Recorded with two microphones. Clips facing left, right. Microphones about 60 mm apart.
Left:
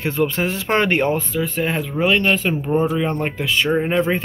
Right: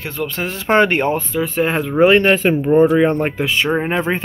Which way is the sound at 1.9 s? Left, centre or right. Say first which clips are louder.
Right 7 dB; right.